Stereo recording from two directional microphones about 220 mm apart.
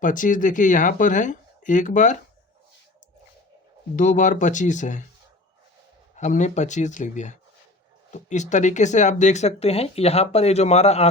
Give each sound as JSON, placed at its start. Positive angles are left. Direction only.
{"t": 0.0, "sound": "speech", "side_deg": 35}
{"t": 3.9, "sound": "speech", "side_deg": 35}
{"t": 6.1, "sound": "speech", "side_deg": 35}